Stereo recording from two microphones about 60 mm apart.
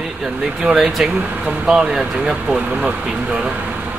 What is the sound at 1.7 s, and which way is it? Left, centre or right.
Speech, centre.